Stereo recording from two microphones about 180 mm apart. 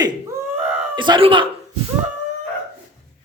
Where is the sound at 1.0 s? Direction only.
30° right (ahead or behind).